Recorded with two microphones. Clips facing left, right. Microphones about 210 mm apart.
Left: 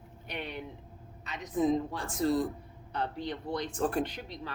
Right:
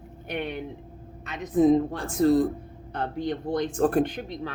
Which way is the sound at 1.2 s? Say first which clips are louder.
Right 8 dB; 50° right (ahead or behind).